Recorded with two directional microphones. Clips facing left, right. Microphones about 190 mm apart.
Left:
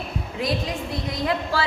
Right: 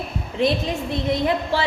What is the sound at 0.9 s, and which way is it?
Speech, 25° right (ahead or behind).